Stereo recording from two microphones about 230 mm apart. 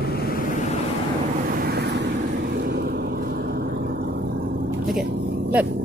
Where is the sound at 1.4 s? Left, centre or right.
Right.